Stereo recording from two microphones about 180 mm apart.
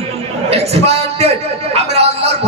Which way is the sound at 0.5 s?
35° right (ahead or behind).